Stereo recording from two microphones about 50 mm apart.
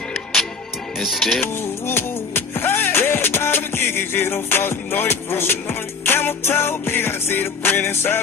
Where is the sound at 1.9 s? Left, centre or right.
Left.